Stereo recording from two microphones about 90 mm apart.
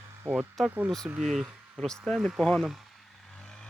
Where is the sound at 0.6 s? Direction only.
20° right (ahead or behind).